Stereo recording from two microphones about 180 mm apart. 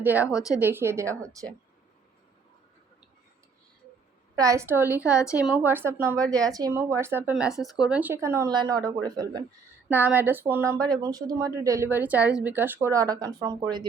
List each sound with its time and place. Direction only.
0.0 s speech: 10° right (ahead or behind)
0.3 s a woman's voice: 20° left (ahead or behind)
0.6 s speech: 10° right (ahead or behind)
4.4 s speech: 15° right (ahead or behind)
9.9 s speech: 10° right (ahead or behind)